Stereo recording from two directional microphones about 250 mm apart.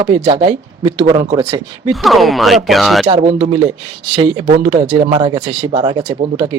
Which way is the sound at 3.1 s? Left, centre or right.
Centre.